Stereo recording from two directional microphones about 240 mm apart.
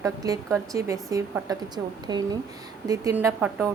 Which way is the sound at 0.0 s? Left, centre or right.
Centre.